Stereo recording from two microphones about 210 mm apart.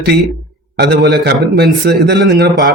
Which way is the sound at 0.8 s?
50° right (ahead or behind).